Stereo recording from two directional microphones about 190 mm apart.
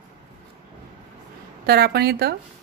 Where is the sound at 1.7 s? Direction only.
55° right (ahead or behind).